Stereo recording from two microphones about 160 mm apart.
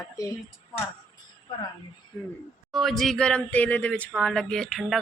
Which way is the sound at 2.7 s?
Centre (ahead or behind).